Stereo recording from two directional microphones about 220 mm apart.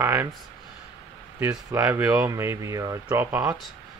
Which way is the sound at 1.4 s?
15° right (ahead or behind).